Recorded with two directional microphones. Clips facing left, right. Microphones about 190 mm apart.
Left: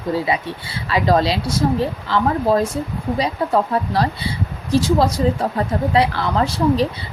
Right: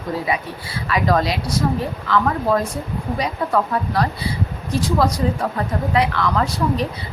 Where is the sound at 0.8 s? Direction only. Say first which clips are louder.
Left 2 dB; 30° left (ahead or behind).